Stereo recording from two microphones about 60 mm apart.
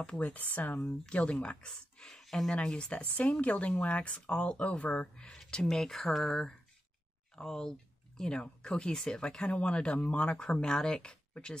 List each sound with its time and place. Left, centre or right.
0.0 s speech: left
5.3 s speech: centre